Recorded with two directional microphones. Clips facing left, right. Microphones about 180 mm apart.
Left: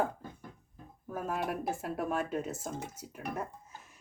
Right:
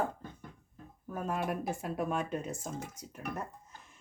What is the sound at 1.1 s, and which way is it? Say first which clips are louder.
Speech: even; 5° left (ahead or behind).